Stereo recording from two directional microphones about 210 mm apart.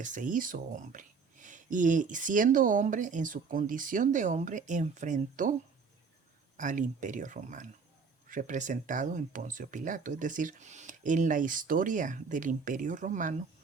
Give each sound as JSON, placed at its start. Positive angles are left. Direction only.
{"t": 0.0, "sound": "speech", "side_deg": -40}
{"t": 6.6, "sound": "speech", "side_deg": -35}